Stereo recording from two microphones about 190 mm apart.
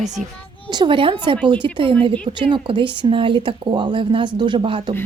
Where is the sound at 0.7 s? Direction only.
25° right (ahead or behind).